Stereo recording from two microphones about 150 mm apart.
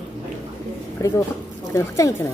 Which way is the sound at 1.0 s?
20° left (ahead or behind).